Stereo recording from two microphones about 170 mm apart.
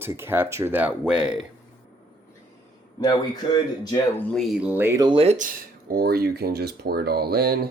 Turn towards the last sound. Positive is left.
turn(degrees=-65)  # may be behind; listen again after turning